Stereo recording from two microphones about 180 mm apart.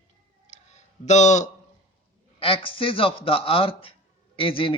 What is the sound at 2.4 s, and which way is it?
A man's voice, 30° left (ahead or behind).